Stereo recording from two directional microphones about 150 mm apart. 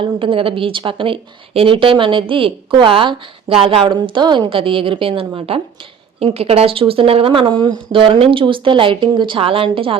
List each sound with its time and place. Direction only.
0.0 s a woman's voice: 35° right (ahead or behind)